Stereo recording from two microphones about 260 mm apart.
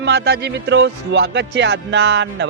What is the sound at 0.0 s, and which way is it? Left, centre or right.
Music, right.